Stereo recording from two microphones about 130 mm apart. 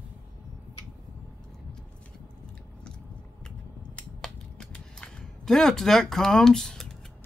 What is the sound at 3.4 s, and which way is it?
Scissors, 5° left (ahead or behind).